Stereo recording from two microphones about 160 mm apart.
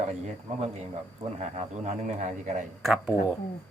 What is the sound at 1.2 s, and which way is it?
Speech, 40° right (ahead or behind).